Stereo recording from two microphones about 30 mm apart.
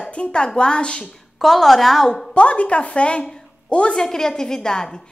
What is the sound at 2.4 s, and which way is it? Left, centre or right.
A woman's voice, left.